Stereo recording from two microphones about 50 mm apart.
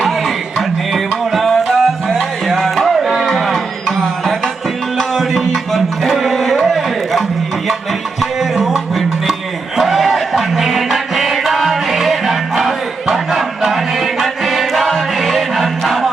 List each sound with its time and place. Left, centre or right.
0.9 s music: centre
4.9 s music: centre
8.4 s music: centre